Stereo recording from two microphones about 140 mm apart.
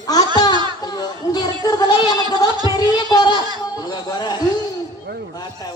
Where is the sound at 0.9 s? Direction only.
30° left (ahead or behind).